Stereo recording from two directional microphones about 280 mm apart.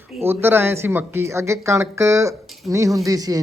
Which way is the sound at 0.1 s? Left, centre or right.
Left.